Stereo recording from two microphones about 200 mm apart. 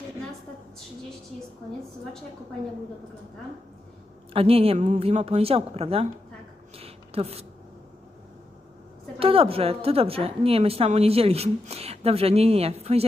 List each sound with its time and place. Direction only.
4.4 s a woman's voice: 30° right (ahead or behind)
6.7 s a sound: 30° right (ahead or behind)
9.1 s a woman's voice: 30° right (ahead or behind)